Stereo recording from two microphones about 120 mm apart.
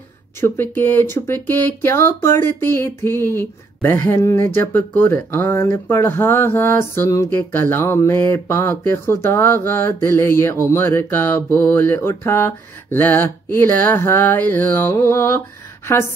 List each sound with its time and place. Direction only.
0.4 s speech: 20° left (ahead or behind)